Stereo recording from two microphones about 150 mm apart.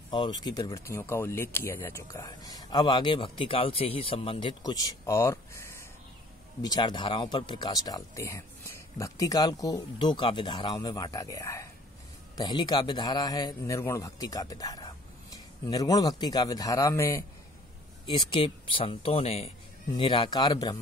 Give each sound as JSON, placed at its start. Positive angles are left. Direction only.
{"t": 0.1, "sound": "speech", "side_deg": 30}
{"t": 18.0, "sound": "speech", "side_deg": 35}